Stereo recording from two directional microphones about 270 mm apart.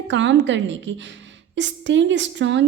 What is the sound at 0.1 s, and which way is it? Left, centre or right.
A woman's voice, right.